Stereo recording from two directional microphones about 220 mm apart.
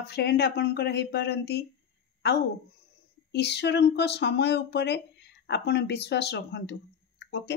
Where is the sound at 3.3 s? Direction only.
50° left (ahead or behind).